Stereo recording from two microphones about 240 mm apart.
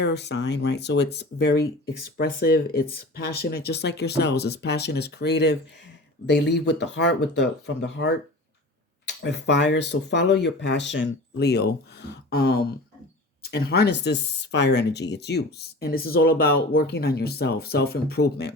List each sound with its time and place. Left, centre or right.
0.0 s speech: left